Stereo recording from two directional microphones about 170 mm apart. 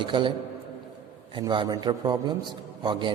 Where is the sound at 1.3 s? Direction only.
25° right (ahead or behind).